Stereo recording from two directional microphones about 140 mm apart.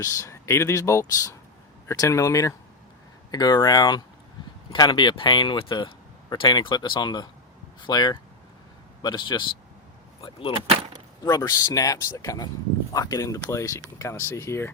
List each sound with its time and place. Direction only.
0.0 s speech: 20° left (ahead or behind); by 10.6 s 40° left (ahead or behind)
11.2 s speech: 25° left (ahead or behind)